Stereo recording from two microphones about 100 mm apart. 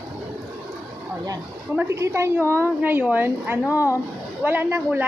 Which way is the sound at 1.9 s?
30° right (ahead or behind).